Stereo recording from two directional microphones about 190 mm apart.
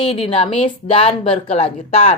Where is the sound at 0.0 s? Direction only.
30° left (ahead or behind).